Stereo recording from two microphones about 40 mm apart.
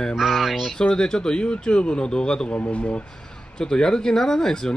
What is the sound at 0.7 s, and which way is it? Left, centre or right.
A man's voice, centre.